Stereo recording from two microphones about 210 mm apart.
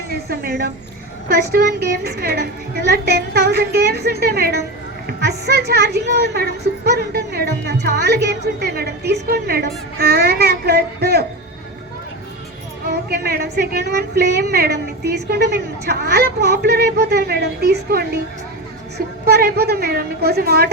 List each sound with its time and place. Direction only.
0.1 s a woman's voice: 50° right (ahead or behind)
12.9 s a woman's voice: 45° right (ahead or behind)